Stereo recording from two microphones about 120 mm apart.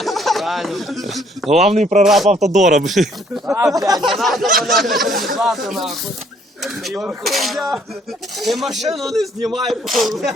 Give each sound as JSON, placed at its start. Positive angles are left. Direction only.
{"t": 0.0, "sound": "speech", "side_deg": 0}
{"t": 1.5, "sound": "speech", "side_deg": -65}
{"t": 2.0, "sound": "speech", "side_deg": 0}
{"t": 2.5, "sound": "speech", "side_deg": -85}
{"t": 2.8, "sound": "speech", "side_deg": 0}
{"t": 3.8, "sound": "speech", "side_deg": -30}
{"t": 4.2, "sound": "speech", "side_deg": 0}